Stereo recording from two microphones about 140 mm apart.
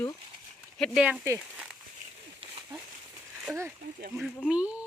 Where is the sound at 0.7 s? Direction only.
5° left (ahead or behind).